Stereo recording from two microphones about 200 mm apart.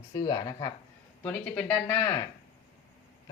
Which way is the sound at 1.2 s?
5° left (ahead or behind).